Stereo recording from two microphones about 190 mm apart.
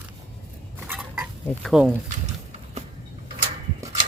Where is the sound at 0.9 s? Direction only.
5° right (ahead or behind).